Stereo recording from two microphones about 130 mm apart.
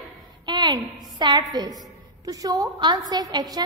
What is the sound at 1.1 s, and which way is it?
A woman's voice, 35° right (ahead or behind).